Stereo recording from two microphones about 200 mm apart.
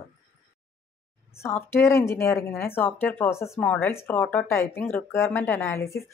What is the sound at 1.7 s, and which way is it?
Speech, 10° left (ahead or behind).